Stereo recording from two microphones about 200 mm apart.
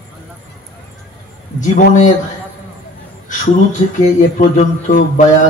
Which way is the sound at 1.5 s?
35° left (ahead or behind).